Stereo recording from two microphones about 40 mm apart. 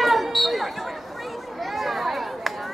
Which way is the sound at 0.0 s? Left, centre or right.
Centre.